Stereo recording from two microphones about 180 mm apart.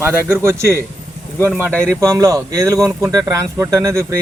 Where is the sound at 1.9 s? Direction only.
20° right (ahead or behind).